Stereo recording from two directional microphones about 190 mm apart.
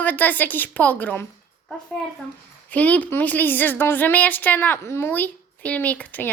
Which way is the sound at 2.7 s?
10° left (ahead or behind).